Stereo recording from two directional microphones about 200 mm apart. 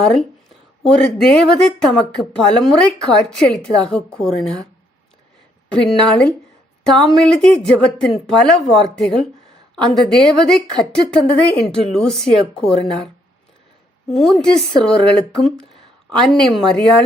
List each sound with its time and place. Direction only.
0.0 s a woman's voice: centre (ahead or behind)
5.6 s a woman's voice: 5° left (ahead or behind)
14.1 s a woman's voice: centre (ahead or behind)